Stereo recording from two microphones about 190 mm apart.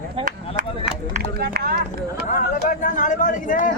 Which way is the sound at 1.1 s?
50° right (ahead or behind).